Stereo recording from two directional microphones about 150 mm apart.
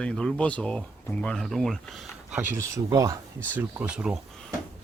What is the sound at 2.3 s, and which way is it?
Speech, 15° right (ahead or behind).